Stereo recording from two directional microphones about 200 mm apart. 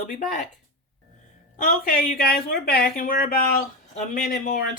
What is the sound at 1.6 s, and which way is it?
Speech, 45° left (ahead or behind).